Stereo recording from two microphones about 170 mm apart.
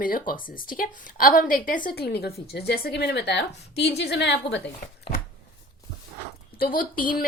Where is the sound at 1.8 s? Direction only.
65° left (ahead or behind).